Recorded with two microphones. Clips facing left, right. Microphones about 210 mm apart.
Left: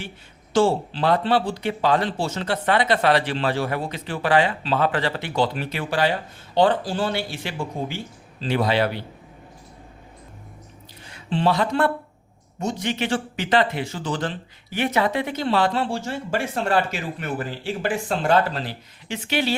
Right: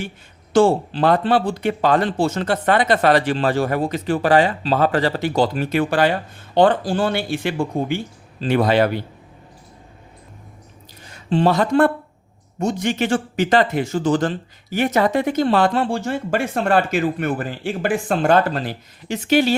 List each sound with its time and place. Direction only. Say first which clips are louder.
0.5 s speech: right 4 dB; 50° right (ahead or behind)
11.0 s speech: right 4 dB; 45° right (ahead or behind)